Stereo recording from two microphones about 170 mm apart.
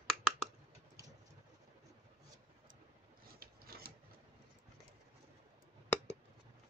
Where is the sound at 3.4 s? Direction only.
60° right (ahead or behind).